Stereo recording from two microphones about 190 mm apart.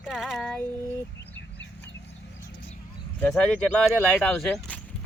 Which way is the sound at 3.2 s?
5° left (ahead or behind).